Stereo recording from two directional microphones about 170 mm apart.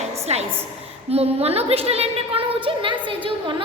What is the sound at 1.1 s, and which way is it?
A woman's voice, 35° right (ahead or behind).